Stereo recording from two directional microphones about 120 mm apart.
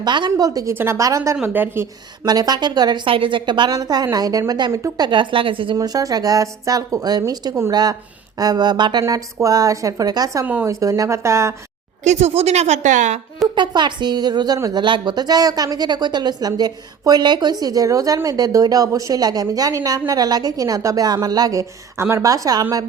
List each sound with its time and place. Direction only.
0.0 s a woman's voice: 40° right (ahead or behind)
0.7 s a woman's voice: 20° right (ahead or behind)
1.4 s a woman's voice: 15° right (ahead or behind)
2.2 s a woman's voice: 35° right (ahead or behind)
5.0 s a woman's voice: 40° right (ahead or behind)
5.7 s a woman's voice: 30° right (ahead or behind)
10.4 s a woman's voice: 15° right (ahead or behind)
10.7 s a woman's voice: 30° right (ahead or behind)
12.0 s a woman's voice: 65° right (ahead or behind); by 13.1 s 90° right
13.6 s a woman's voice: 40° right (ahead or behind)